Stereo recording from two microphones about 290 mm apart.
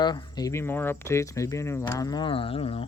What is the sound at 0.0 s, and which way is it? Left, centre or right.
Speech, centre.